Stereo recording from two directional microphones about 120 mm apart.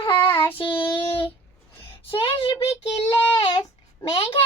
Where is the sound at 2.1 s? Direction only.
50° left (ahead or behind).